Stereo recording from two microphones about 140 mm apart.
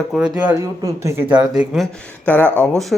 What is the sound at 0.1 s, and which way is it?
Speech, centre (ahead or behind).